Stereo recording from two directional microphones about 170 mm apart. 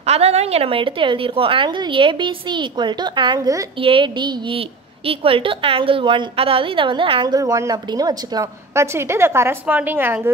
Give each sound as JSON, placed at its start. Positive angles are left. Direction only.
{"t": 0.0, "sound": "a woman's voice", "side_deg": -40}